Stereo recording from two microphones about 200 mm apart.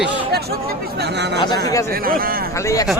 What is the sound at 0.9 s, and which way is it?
Speech, 55° right (ahead or behind).